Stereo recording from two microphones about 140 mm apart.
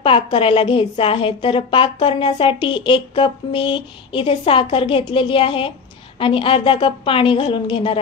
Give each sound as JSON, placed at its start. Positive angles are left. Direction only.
{"t": 0.0, "sound": "a woman's voice", "side_deg": 40}